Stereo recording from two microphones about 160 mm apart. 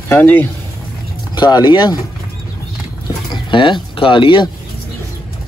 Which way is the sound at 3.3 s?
30° left (ahead or behind).